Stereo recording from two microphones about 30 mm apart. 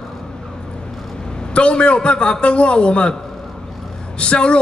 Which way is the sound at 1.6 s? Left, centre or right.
Left.